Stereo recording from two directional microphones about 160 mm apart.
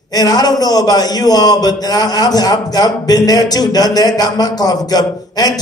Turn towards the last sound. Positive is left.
turn(degrees=25)  # may be behind; listen again after turning